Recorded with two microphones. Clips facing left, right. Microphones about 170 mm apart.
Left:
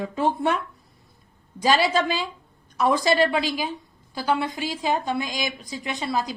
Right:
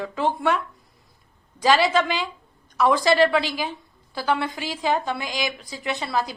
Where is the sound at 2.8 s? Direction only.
20° left (ahead or behind).